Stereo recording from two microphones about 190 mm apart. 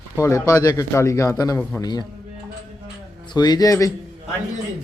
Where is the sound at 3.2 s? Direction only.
20° left (ahead or behind).